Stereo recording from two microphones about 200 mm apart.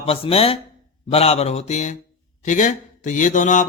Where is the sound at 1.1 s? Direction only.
30° left (ahead or behind).